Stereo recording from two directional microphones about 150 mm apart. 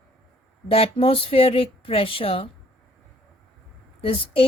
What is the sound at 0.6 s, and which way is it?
Speech, 40° left (ahead or behind).